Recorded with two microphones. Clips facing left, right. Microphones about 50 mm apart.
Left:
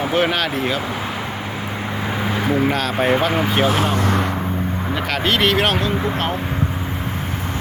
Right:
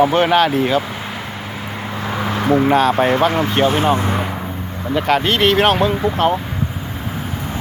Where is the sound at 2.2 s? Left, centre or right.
Centre.